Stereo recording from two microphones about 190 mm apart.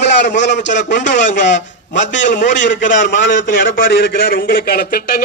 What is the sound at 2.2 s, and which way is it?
Speech, 40° left (ahead or behind).